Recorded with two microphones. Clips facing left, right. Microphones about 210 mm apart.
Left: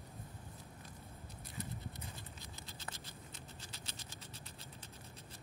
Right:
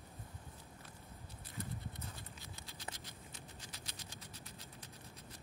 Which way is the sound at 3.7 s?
25° left (ahead or behind).